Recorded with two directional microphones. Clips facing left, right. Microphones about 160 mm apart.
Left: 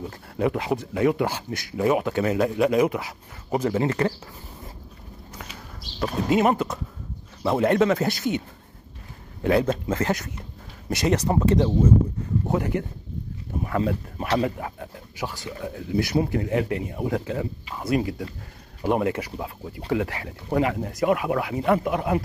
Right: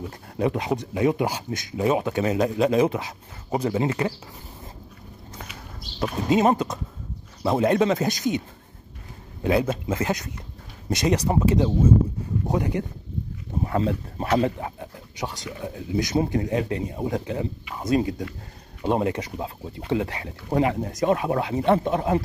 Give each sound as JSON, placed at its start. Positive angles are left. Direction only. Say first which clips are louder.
{"t": 0.4, "sound": "speech", "louder": "even", "side_deg": -20}
{"t": 6.2, "sound": "speech", "louder": "right 1 dB", "side_deg": -20}
{"t": 9.4, "sound": "speech", "louder": "left 1 dB", "side_deg": -20}
{"t": 13.7, "sound": "speech", "louder": "even", "side_deg": -30}